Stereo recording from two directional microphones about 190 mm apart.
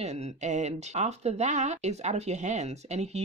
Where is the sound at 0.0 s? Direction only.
35° right (ahead or behind).